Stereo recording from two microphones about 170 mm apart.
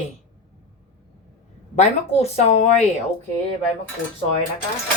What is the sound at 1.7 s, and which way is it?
Speech, 40° left (ahead or behind).